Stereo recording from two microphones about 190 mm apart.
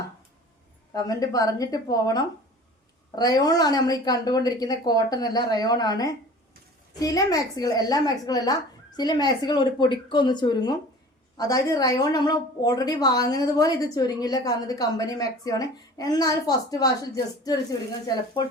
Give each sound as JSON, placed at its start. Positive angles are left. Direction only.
{"t": 0.9, "sound": "a woman's voice", "side_deg": 20}